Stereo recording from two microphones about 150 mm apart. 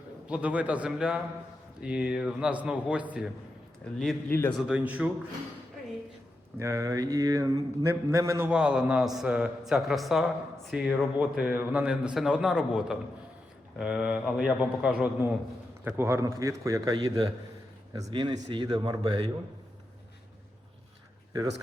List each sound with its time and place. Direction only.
0.3 s a man's voice: 10° right (ahead or behind)
3.9 s a man's voice: centre (ahead or behind)
4.3 s a man's voice: 15° left (ahead or behind)
4.5 s a man's voice: 10° right (ahead or behind)
6.6 s mantra: 20° right (ahead or behind)
8.4 s a man's voice: 5° right (ahead or behind)
15.8 s mantra: 15° right (ahead or behind)
18.1 s a man's voice: 30° right (ahead or behind)